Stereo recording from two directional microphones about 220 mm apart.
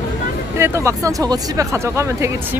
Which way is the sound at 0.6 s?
10° right (ahead or behind).